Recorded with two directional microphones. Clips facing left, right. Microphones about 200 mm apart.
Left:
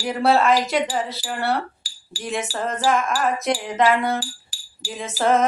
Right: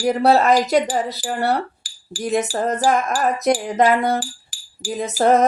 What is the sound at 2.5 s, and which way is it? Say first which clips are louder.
Wind chime: right 3 dB; 40° right (ahead or behind).